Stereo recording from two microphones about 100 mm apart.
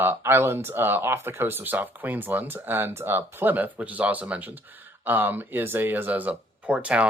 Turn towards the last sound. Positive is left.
turn(degrees=-10)  # may be behind; listen again after turning